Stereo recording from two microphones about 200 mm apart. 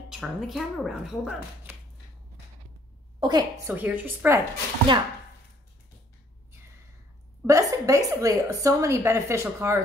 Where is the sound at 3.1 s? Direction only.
20° right (ahead or behind).